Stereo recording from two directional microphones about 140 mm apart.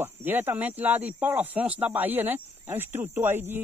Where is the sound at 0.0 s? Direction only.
15° right (ahead or behind).